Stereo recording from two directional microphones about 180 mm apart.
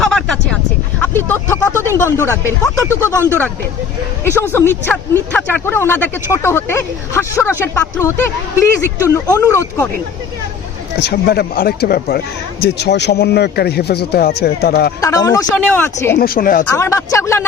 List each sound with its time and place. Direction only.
0.0 s a sound: 5° left (ahead or behind)
1.1 s speech: 10° left (ahead or behind)
4.5 s speech: 10° left (ahead or behind)
11.0 s speech: 60° left (ahead or behind)
15.0 s speech: 20° left (ahead or behind)
15.5 s speech: 10° left (ahead or behind)
16.1 s speech: 55° left (ahead or behind)
16.6 s speech: 15° left (ahead or behind)